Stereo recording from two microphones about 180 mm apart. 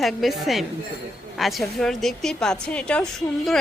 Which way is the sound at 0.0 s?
Centre (ahead or behind).